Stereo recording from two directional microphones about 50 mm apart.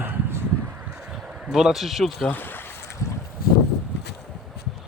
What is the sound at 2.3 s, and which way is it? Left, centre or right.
Speech, left.